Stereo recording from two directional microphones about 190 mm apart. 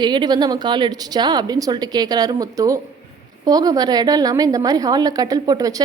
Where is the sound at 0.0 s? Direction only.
25° right (ahead or behind).